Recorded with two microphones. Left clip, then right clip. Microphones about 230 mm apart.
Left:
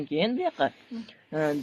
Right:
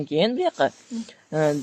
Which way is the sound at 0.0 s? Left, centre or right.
Right.